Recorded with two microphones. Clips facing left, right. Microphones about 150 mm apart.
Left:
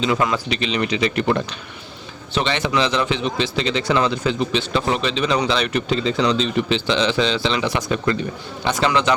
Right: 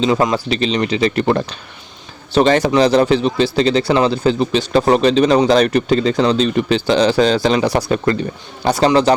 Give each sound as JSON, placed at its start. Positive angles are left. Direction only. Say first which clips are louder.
{"t": 0.0, "sound": "speech", "louder": "right 5 dB", "side_deg": -35}